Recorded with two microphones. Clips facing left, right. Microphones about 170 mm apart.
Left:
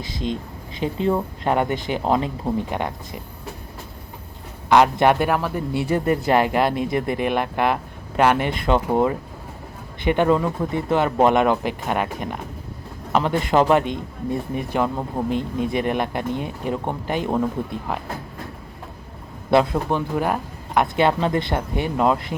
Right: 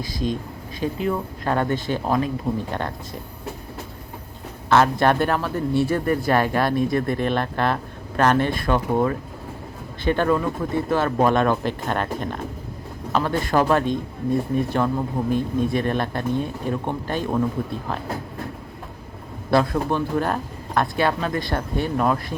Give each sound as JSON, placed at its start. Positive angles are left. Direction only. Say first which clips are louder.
{"t": 0.0, "sound": "speech", "louder": "right 1 dB", "side_deg": 20}
{"t": 1.5, "sound": "speech", "louder": "right 2 dB", "side_deg": 15}
{"t": 4.7, "sound": "speech", "louder": "left 2 dB", "side_deg": 15}
{"t": 19.5, "sound": "a man's voice", "louder": "left 2 dB", "side_deg": 20}